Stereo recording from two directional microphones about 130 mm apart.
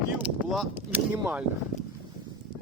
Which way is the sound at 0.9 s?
15° right (ahead or behind).